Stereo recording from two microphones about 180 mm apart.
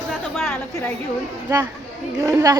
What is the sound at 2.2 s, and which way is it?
Speech, 20° right (ahead or behind).